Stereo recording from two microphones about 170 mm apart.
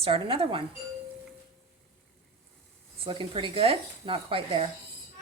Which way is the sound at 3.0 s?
30° right (ahead or behind).